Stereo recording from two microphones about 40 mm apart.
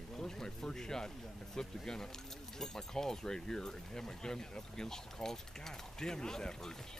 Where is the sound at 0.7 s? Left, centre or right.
Centre.